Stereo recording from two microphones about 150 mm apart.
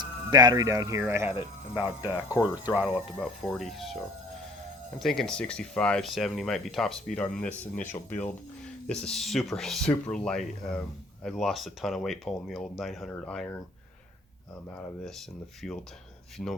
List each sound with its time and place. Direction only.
0.0 s speech: 30° right (ahead or behind)
1.4 s speech: 35° left (ahead or behind)
2.4 s speech: 10° right (ahead or behind); by 13.5 s 5° left (ahead or behind)
15.6 s speech: 5° left (ahead or behind)
16.4 s speech: 20° left (ahead or behind)